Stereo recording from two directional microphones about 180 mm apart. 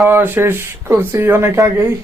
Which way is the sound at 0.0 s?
10° right (ahead or behind).